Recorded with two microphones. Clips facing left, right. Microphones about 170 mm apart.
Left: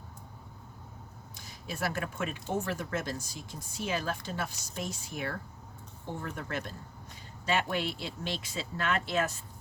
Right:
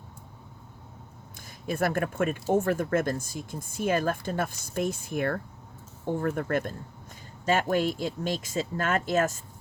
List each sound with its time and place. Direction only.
1.4 s speech: 50° right (ahead or behind)